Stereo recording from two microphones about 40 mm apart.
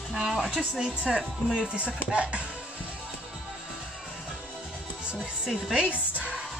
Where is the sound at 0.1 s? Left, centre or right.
Centre.